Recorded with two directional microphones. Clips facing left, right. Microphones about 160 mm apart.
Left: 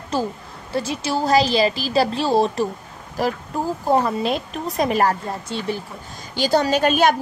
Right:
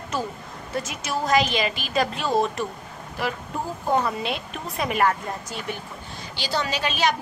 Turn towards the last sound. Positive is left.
turn(degrees=50)  # may be behind; listen again after turning